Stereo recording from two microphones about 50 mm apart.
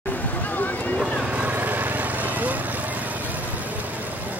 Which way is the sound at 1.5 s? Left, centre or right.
Right.